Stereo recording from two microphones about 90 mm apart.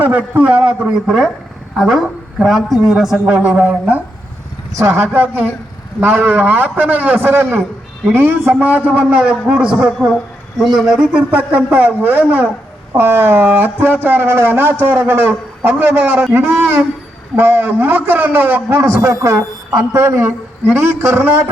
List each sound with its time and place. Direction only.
0.0 s a man's voice: 15° right (ahead or behind)